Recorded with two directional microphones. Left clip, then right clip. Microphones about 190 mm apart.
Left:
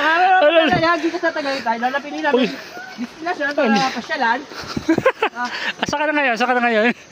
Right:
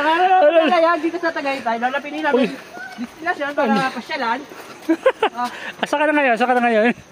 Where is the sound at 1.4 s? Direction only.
Centre (ahead or behind).